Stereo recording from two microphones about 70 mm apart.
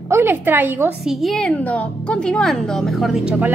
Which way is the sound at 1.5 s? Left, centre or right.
Left.